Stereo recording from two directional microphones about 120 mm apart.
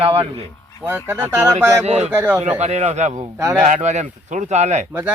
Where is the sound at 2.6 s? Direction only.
70° right (ahead or behind).